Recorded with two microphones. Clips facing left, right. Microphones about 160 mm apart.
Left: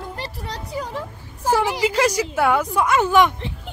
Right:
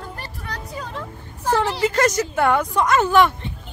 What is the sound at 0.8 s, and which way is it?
Speech, 15° left (ahead or behind).